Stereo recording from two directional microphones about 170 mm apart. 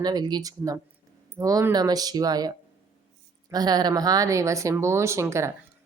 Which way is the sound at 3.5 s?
25° right (ahead or behind).